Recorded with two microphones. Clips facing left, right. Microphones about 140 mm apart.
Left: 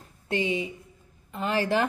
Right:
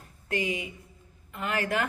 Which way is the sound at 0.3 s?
30° left (ahead or behind).